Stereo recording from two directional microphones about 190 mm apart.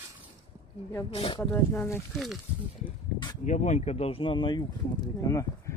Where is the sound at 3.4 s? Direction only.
40° left (ahead or behind).